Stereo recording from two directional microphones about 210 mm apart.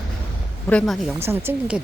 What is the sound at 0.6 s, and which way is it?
Speech, 5° left (ahead or behind).